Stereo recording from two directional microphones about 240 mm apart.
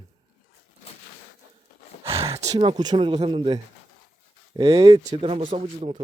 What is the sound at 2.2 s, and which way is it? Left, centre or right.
Speech, right.